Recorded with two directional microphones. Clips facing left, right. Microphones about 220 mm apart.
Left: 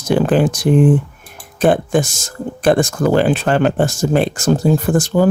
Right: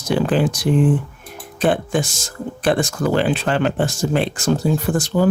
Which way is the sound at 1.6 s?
45° left (ahead or behind).